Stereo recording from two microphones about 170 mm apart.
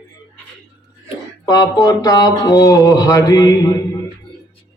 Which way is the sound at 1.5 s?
20° left (ahead or behind).